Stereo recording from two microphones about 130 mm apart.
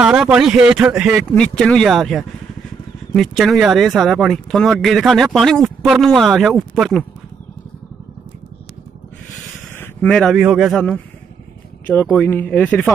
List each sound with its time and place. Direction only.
0.0 s speech: 5° right (ahead or behind)
1.3 s speech: 5° left (ahead or behind)
9.8 s a sound: 5° left (ahead or behind)
10.4 s speech: 5° right (ahead or behind)
11.8 s speech: 15° left (ahead or behind)